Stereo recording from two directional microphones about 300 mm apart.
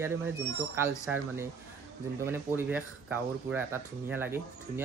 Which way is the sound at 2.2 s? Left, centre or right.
Centre.